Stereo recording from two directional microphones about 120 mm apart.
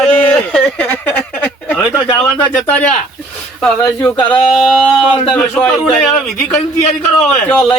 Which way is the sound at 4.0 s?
10° left (ahead or behind).